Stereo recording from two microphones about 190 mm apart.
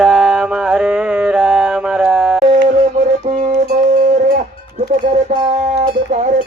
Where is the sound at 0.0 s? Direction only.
Centre (ahead or behind).